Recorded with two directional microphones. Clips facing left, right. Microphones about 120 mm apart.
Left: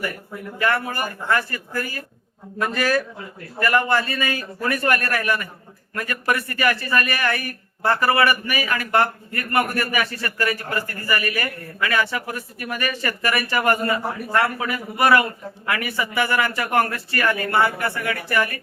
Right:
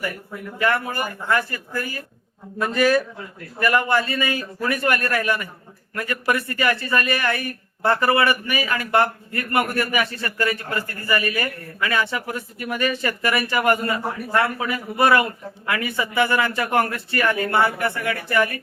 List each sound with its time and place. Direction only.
0.6 s a man's voice: 20° right (ahead or behind)